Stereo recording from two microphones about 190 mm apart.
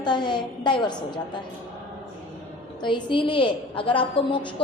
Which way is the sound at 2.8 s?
25° left (ahead or behind).